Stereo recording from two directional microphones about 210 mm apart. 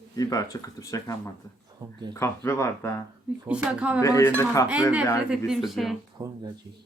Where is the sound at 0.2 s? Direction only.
15° left (ahead or behind).